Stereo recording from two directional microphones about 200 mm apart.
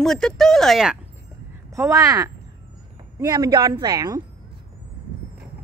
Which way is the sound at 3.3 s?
20° right (ahead or behind).